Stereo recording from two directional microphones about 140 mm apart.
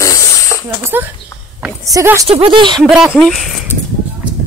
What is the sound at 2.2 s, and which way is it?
Speech, 45° right (ahead or behind).